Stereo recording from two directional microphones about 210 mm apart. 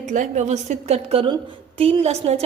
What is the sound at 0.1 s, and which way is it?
A woman's voice, 35° right (ahead or behind).